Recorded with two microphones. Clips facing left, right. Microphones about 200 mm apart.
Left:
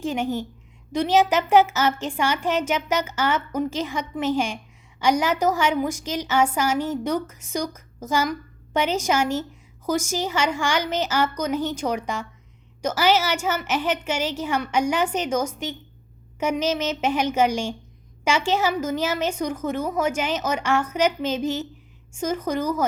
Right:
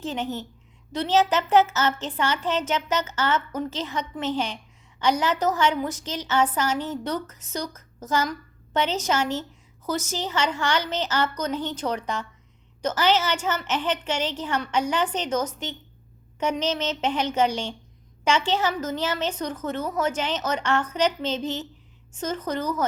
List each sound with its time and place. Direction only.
0.0 s a woman's voice: 10° left (ahead or behind)